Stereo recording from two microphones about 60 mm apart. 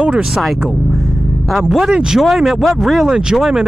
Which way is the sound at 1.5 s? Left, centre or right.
Centre.